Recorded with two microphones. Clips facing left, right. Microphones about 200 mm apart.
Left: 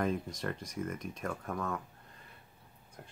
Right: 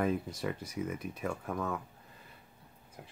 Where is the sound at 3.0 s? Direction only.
5° right (ahead or behind).